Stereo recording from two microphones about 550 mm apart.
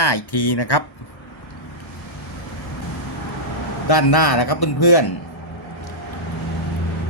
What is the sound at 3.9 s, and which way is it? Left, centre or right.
Speech, left.